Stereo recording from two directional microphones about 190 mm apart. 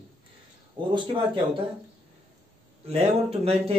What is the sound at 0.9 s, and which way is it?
Speech, 25° right (ahead or behind).